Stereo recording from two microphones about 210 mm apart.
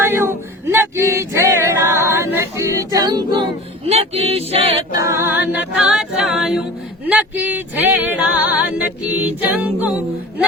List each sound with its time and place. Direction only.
0.0 s a sound: 10° right (ahead or behind)
2.9 s music: 20° right (ahead or behind)
3.8 s music: 30° right (ahead or behind)
4.9 s a capella: 15° right (ahead or behind)